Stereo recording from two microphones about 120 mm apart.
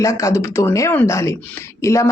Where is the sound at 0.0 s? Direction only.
25° left (ahead or behind).